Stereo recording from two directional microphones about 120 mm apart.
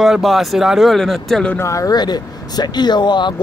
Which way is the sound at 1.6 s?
25° left (ahead or behind).